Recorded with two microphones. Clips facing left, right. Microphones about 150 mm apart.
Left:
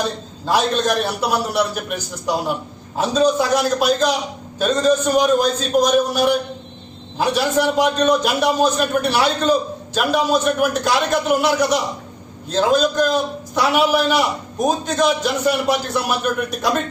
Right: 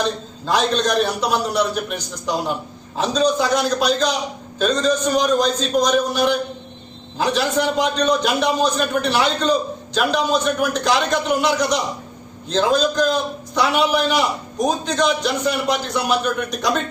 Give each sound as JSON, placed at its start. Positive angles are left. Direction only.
{"t": 0.4, "sound": "a man's voice", "side_deg": 5}